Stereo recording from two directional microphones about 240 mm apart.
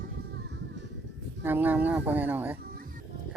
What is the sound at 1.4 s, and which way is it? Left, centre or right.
Speech, centre.